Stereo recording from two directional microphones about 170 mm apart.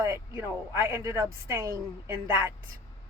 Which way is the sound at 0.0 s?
15° right (ahead or behind).